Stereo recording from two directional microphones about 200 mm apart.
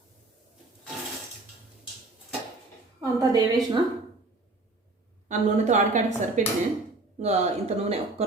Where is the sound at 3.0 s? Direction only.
15° right (ahead or behind).